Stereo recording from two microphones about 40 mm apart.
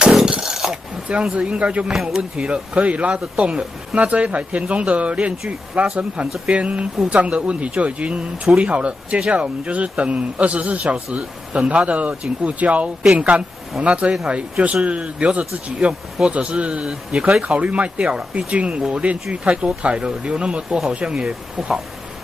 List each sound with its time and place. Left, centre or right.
0.3 s a sound: centre
0.7 s speech: right
1.9 s speech: centre
2.3 s speech: right
21.6 s speech: centre